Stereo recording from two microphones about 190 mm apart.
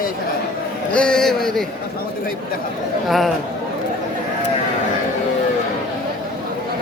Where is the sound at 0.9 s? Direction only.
5° left (ahead or behind).